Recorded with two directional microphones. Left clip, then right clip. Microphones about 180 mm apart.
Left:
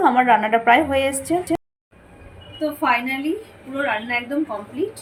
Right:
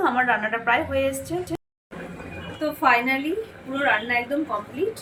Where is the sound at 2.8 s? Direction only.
Centre (ahead or behind).